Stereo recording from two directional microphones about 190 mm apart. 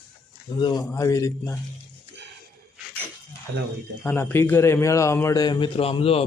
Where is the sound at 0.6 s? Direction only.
20° left (ahead or behind).